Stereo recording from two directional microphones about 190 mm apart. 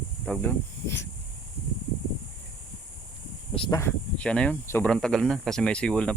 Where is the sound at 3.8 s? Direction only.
10° left (ahead or behind).